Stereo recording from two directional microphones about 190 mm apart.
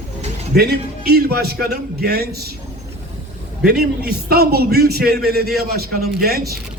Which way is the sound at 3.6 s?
55° right (ahead or behind).